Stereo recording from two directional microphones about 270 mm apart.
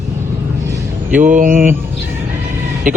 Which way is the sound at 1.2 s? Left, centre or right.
Right.